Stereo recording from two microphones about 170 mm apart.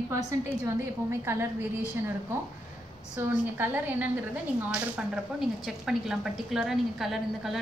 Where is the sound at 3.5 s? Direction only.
10° right (ahead or behind).